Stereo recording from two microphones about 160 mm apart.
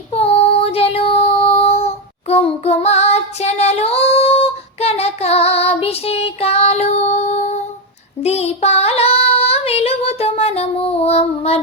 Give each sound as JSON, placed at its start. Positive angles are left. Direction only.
{"t": 0.1, "sound": "child singing", "side_deg": 40}